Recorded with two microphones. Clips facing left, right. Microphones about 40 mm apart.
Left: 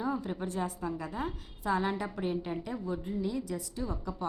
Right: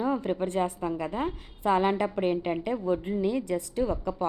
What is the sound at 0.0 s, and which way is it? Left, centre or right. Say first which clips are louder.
A woman's voice: right 6 dB; right.